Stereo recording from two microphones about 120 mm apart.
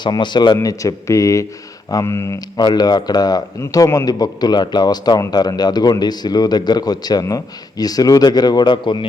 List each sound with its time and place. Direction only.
0.0 s a man's voice: 40° left (ahead or behind); by 2.4 s 25° left (ahead or behind)
2.6 s a man's voice: 35° left (ahead or behind)